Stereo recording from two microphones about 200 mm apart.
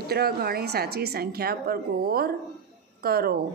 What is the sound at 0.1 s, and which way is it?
A woman's voice, 50° right (ahead or behind).